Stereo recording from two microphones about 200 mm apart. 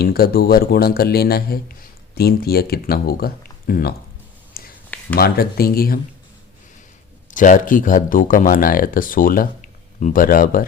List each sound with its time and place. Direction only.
0.0 s speech: 50° left (ahead or behind)
4.6 s a sound: 50° left (ahead or behind)
5.1 s speech: 50° left (ahead or behind)
7.3 s speech: 40° left (ahead or behind)